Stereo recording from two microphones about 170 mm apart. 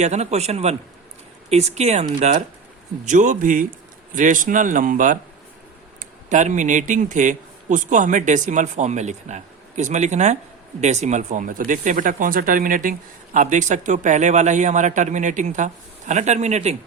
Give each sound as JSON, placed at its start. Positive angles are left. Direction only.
{"t": 0.0, "sound": "speech", "side_deg": -40}